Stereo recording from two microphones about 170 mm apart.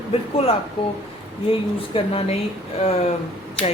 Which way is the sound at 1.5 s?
35° left (ahead or behind).